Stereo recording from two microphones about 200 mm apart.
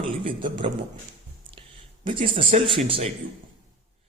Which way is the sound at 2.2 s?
25° right (ahead or behind).